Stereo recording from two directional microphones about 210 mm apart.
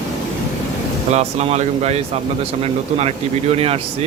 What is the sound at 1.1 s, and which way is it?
Speech, 30° right (ahead or behind).